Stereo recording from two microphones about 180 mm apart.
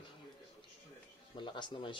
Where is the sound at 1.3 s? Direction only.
25° left (ahead or behind).